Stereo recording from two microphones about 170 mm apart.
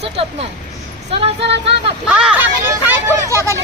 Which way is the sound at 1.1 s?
35° right (ahead or behind).